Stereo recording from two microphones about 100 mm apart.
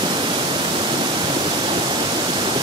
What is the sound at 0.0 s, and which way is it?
Pink noise, 50° right (ahead or behind).